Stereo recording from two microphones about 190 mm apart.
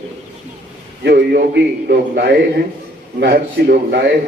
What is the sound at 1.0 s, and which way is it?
A man's voice, 55° right (ahead or behind).